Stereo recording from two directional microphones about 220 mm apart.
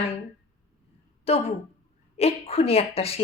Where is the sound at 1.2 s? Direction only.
30° left (ahead or behind).